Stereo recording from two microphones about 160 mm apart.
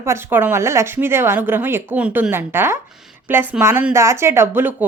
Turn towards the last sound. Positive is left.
turn(degrees=-10)  # may be behind; listen again after turning